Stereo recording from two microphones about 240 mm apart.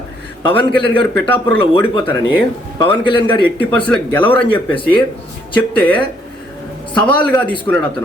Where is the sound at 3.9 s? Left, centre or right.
Centre.